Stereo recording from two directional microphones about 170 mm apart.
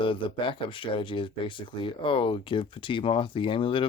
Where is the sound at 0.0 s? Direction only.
30° left (ahead or behind).